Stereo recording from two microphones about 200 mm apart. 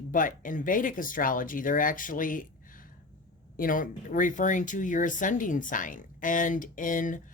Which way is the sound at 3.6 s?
45° left (ahead or behind).